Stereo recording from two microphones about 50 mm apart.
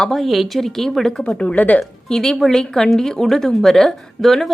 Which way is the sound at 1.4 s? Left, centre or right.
Left.